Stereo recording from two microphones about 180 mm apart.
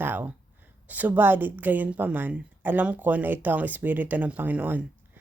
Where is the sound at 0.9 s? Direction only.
10° right (ahead or behind).